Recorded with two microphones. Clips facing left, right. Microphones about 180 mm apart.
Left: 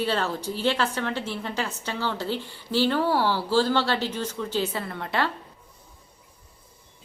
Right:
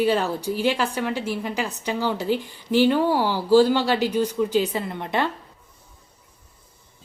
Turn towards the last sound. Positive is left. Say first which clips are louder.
# right 3 dB
turn(degrees=-20)  # may be behind; listen again after turning